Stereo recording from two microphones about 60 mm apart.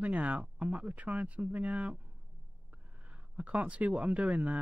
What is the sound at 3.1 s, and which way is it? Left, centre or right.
Speech, right.